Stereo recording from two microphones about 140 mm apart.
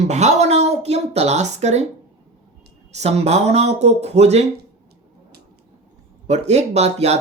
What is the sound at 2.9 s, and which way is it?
Speech, 50° right (ahead or behind).